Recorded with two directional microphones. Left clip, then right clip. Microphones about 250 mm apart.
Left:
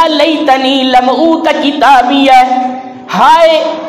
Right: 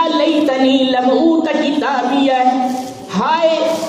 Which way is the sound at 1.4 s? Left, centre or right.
Left.